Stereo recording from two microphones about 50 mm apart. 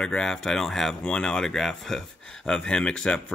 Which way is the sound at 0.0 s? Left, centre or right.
Centre.